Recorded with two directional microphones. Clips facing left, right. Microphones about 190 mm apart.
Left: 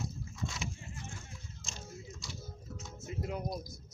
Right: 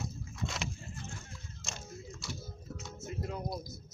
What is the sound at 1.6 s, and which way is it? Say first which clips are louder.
Biting: right 5 dB; 70° right (ahead or behind).